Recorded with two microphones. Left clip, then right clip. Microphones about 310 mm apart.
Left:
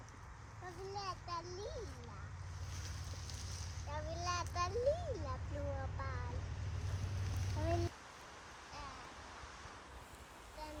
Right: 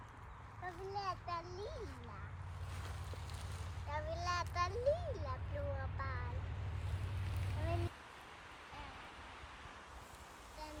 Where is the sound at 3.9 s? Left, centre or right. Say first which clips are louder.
Right 1 dB; left.